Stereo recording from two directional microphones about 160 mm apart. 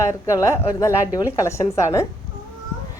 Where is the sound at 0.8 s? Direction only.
20° left (ahead or behind).